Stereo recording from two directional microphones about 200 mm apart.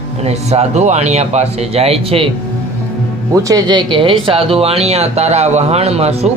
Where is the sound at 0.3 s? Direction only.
30° right (ahead or behind).